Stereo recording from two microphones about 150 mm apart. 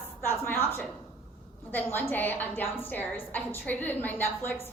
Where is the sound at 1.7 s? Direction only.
15° left (ahead or behind).